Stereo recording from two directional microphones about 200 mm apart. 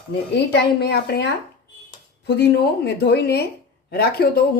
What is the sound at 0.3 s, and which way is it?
A woman's voice, 55° left (ahead or behind).